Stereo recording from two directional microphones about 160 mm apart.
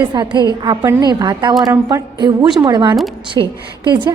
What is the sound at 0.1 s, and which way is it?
A woman's voice, 25° right (ahead or behind).